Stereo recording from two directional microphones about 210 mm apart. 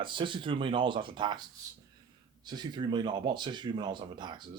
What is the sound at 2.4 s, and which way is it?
A man's voice, 20° right (ahead or behind).